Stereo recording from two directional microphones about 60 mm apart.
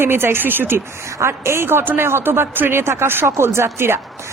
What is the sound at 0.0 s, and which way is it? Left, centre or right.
Speech, right.